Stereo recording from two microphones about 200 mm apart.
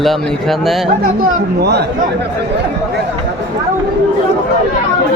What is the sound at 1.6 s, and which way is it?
Speech, 55° right (ahead or behind).